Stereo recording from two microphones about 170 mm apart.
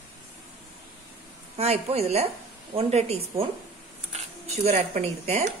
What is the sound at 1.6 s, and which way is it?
A woman's voice, 35° right (ahead or behind).